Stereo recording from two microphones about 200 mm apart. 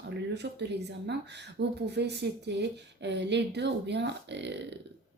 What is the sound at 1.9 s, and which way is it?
Speech, 55° right (ahead or behind).